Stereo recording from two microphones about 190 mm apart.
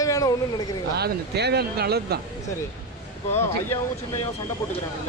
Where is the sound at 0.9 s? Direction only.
60° right (ahead or behind).